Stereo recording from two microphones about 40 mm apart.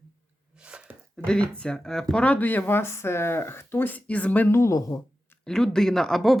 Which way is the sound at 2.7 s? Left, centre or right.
Left.